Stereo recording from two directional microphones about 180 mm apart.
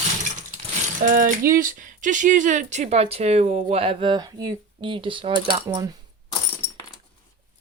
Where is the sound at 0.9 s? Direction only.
45° right (ahead or behind); by 5.6 s 30° right (ahead or behind).